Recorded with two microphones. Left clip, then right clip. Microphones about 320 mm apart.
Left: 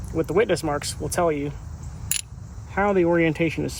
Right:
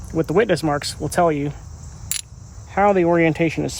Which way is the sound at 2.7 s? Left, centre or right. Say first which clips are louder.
Right 4 dB; right.